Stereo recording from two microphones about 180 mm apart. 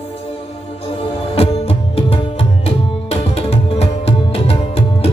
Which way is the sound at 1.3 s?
35° left (ahead or behind).